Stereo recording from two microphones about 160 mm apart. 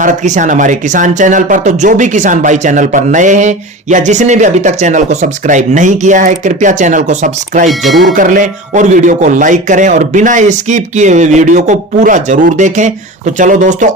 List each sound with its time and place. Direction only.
0.0 s speech: 55° right (ahead or behind)
7.7 s speech: centre (ahead or behind)
8.1 s speech: 55° right (ahead or behind)